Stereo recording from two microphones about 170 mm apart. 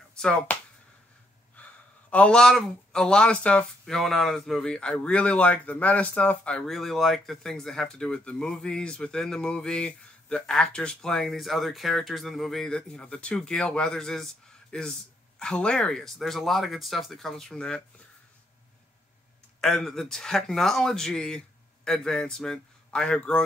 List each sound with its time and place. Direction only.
0.2 s speech: 5° left (ahead or behind)
1.6 s speech: 10° left (ahead or behind)
19.6 s speech: centre (ahead or behind)